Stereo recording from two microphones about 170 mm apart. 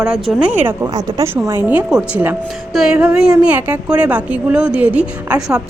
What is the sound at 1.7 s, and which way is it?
A woman's voice, 5° right (ahead or behind).